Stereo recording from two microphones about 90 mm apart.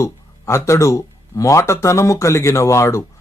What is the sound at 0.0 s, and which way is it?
Speech, 35° left (ahead or behind).